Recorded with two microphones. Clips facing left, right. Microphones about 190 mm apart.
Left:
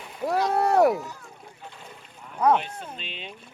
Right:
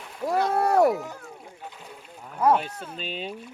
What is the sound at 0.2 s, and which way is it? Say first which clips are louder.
Speech: even; 5° left (ahead or behind).